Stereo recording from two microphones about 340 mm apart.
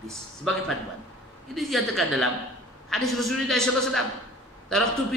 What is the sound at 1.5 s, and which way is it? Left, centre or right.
A man's voice, centre.